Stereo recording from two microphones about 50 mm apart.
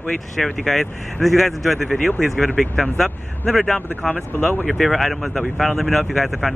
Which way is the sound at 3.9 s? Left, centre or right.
Left.